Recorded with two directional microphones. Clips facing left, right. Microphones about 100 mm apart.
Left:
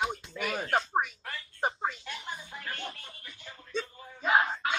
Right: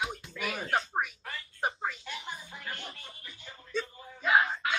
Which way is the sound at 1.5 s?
30° left (ahead or behind).